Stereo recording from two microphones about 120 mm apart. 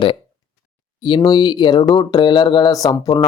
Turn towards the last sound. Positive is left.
turn(degrees=30)  # may be behind; listen again after turning